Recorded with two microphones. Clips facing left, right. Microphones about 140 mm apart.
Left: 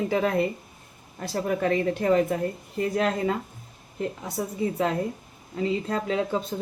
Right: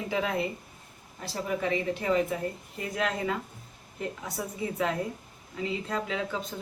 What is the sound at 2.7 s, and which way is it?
Speech, 40° left (ahead or behind).